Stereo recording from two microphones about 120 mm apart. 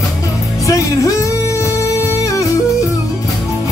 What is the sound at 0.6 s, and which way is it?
Music, 25° left (ahead or behind).